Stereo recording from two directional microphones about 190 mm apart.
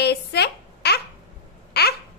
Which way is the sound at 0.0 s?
60° left (ahead or behind).